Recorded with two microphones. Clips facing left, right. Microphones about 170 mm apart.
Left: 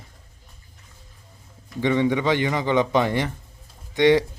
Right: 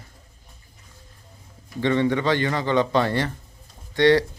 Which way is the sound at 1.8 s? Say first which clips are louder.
Even; 15° left (ahead or behind).